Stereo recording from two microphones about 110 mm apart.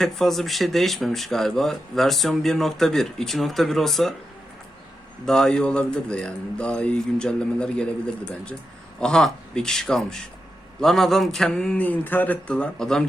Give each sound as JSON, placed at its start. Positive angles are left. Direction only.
{"t": 0.0, "sound": "speech", "side_deg": 0}
{"t": 5.2, "sound": "a man's voice", "side_deg": 5}